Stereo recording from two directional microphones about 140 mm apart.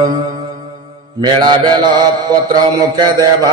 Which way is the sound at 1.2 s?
30° right (ahead or behind).